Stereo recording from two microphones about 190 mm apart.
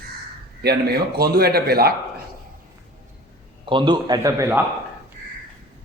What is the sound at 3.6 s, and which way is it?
A man's voice, 25° right (ahead or behind).